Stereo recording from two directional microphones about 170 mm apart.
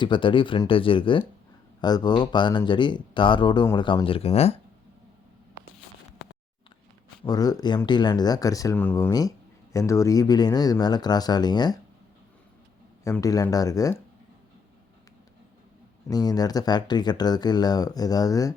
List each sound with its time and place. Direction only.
0.0 s speech: 30° left (ahead or behind)
7.3 s speech: 20° left (ahead or behind)
9.0 s speech: 20° left (ahead or behind)
13.1 s speech: 20° left (ahead or behind)
16.0 s speech: 20° left (ahead or behind)